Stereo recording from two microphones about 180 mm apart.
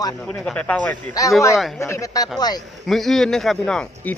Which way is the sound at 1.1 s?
20° left (ahead or behind).